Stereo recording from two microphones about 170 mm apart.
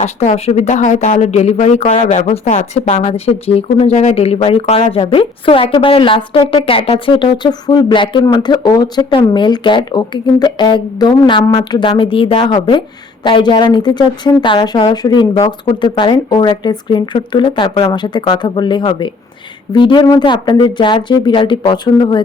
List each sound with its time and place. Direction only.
0.0 s a woman's voice: 40° left (ahead or behind)